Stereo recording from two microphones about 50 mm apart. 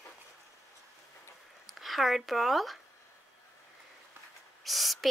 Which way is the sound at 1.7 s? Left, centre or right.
Centre.